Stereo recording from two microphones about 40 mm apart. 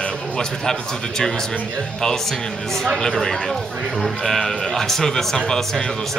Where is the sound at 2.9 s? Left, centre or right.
Centre.